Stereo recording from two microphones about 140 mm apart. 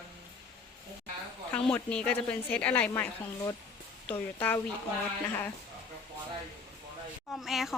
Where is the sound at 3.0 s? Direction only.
20° left (ahead or behind).